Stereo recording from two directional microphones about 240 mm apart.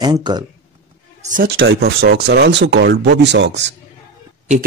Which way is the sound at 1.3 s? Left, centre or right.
Right.